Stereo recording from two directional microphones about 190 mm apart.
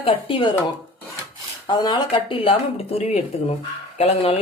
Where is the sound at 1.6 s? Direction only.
20° left (ahead or behind).